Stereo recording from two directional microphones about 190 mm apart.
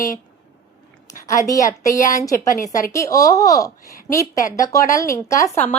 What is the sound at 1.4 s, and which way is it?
A woman's voice, 15° left (ahead or behind).